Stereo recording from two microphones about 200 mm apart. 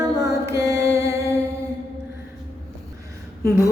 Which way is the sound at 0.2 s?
15° right (ahead or behind).